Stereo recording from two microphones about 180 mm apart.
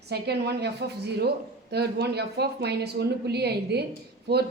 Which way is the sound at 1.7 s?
65° right (ahead or behind).